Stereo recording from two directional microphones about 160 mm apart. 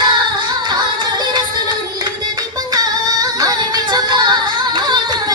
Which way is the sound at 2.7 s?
25° right (ahead or behind).